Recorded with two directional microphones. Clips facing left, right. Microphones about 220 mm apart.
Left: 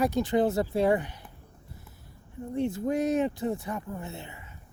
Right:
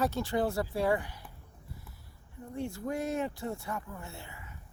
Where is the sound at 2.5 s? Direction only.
20° left (ahead or behind).